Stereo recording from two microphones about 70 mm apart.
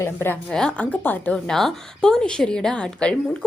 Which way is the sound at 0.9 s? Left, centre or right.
Left.